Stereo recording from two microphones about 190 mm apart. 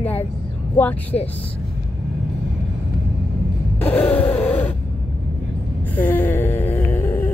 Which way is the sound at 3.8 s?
10° left (ahead or behind).